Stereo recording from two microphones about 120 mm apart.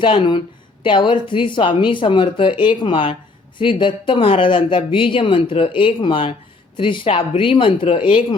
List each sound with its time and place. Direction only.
0.0 s speech: 45° left (ahead or behind)